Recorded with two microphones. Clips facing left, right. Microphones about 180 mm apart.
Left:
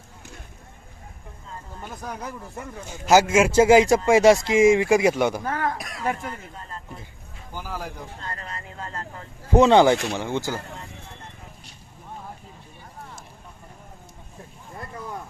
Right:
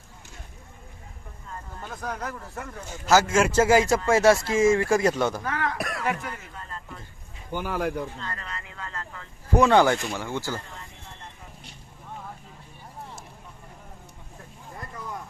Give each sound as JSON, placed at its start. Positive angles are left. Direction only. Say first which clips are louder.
{"t": 1.8, "sound": "speech", "louder": "right 1 dB", "side_deg": 10}
{"t": 5.7, "sound": "a sound", "louder": "right 5 dB", "side_deg": -65}
{"t": 6.1, "sound": "speech", "louder": "left 1 dB", "side_deg": 35}
{"t": 7.5, "sound": "speech", "louder": "right 6 dB", "side_deg": -65}
{"t": 8.2, "sound": "speech", "louder": "left 1 dB", "side_deg": 35}
{"t": 9.6, "sound": "speech", "louder": "left 4 dB", "side_deg": 20}